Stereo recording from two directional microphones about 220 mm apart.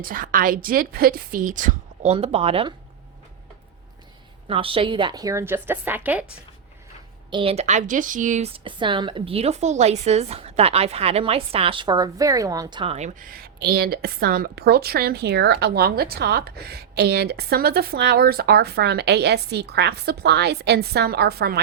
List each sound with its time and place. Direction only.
0.0 s a woman's voice: 40° right (ahead or behind)
4.4 s a woman's voice: 25° right (ahead or behind); by 6.2 s 5° right (ahead or behind)
7.3 s speech: 25° right (ahead or behind); by 21.6 s 45° right (ahead or behind)